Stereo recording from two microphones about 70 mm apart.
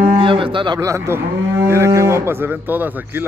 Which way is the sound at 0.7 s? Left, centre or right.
Right.